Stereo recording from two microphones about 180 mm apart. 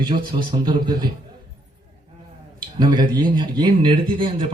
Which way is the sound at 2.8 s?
25° right (ahead or behind).